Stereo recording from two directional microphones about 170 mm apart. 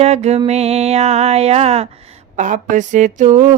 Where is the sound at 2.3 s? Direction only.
50° right (ahead or behind).